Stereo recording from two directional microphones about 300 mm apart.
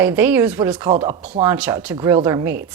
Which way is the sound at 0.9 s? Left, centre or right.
Centre.